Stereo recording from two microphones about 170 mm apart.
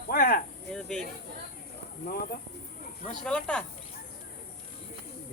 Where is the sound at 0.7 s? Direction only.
5° left (ahead or behind).